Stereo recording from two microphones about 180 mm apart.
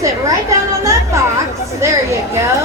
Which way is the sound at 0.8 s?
15° right (ahead or behind).